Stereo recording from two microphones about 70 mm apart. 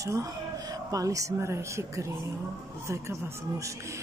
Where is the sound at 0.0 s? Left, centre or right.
Right.